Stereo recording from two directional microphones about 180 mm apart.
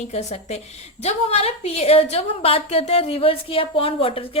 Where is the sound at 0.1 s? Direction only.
40° left (ahead or behind).